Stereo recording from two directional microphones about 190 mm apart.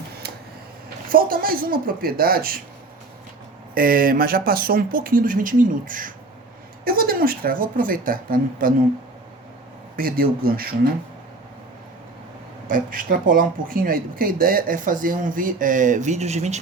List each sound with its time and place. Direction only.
1.1 s speech: 50° right (ahead or behind)
3.8 s speech: 50° right (ahead or behind)
10.0 s speech: 50° right (ahead or behind)
12.6 s speech: 45° right (ahead or behind)